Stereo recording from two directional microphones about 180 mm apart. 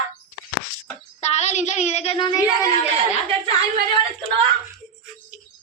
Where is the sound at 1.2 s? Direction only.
40° left (ahead or behind); by 2.7 s 25° left (ahead or behind).